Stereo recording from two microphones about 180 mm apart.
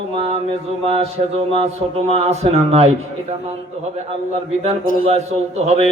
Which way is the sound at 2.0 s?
35° right (ahead or behind).